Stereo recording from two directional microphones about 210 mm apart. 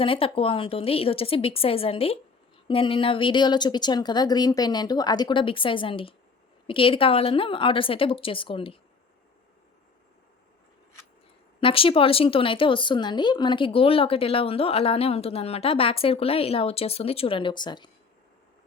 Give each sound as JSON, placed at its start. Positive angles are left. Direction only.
{"t": 0.0, "sound": "speech", "side_deg": 25}
{"t": 11.6, "sound": "speech", "side_deg": 25}